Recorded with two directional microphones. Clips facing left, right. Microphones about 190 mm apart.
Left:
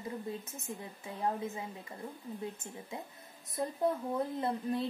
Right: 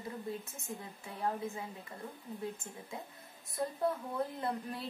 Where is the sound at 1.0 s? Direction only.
20° left (ahead or behind).